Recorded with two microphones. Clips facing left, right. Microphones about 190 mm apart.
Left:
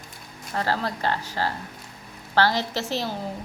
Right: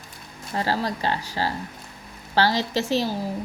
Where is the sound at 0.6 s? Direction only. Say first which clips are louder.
Right 1 dB; 15° right (ahead or behind).